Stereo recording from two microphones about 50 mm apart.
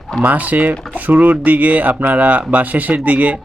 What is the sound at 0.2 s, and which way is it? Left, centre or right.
Speech, right.